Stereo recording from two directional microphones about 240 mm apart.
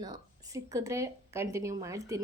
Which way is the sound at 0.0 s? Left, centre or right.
Centre.